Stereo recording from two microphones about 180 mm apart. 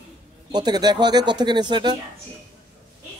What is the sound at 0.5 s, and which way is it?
Speech, 25° right (ahead or behind).